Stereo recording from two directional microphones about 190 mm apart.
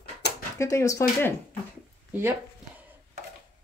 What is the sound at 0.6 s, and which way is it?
Speech, 15° left (ahead or behind).